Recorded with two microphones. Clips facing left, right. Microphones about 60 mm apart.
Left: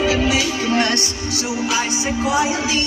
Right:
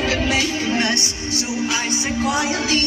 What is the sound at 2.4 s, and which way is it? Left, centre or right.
Music, right.